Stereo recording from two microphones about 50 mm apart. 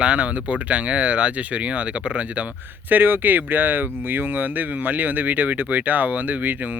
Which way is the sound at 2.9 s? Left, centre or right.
Right.